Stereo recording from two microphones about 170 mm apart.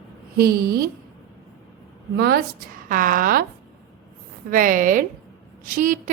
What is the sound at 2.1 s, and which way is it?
Speech, 75° right (ahead or behind).